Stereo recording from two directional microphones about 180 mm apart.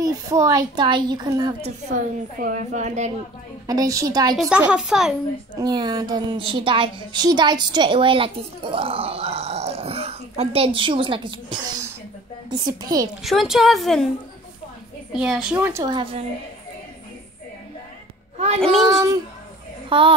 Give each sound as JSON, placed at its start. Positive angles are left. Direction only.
{"t": 0.0, "sound": "a woman's voice", "side_deg": -20}
{"t": 2.4, "sound": "a woman's voice", "side_deg": -45}
{"t": 3.6, "sound": "a woman's voice", "side_deg": -20}
{"t": 4.4, "sound": "a woman's voice", "side_deg": -5}
{"t": 5.6, "sound": "a woman's voice", "side_deg": -25}
{"t": 13.2, "sound": "a woman's voice", "side_deg": 0}
{"t": 15.1, "sound": "a woman's voice", "side_deg": -5}
{"t": 18.6, "sound": "a woman's voice", "side_deg": 0}
{"t": 19.9, "sound": "a woman's voice", "side_deg": -30}